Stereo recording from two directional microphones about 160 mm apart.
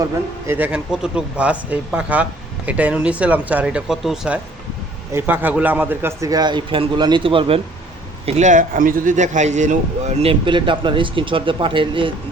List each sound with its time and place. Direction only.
0.0 s a man's voice: 15° right (ahead or behind); by 7.6 s 35° right (ahead or behind)
8.3 s a man's voice: 50° right (ahead or behind); by 12.1 s 30° right (ahead or behind)